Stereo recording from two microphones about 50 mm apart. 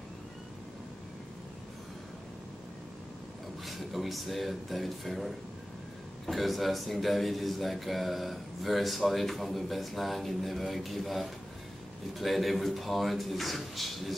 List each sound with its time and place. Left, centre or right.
3.6 s speech: centre